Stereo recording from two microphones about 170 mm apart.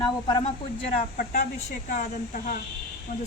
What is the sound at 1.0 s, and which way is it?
Speech, 45° left (ahead or behind).